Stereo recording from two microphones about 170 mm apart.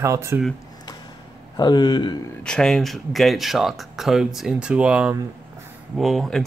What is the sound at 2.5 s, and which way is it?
Speech, 5° left (ahead or behind).